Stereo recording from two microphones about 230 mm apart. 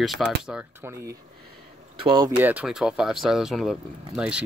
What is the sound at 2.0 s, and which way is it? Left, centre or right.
Speech, centre.